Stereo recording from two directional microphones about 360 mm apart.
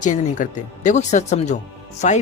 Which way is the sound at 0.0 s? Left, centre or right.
Left.